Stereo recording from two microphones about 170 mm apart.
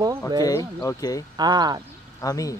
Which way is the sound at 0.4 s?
20° left (ahead or behind).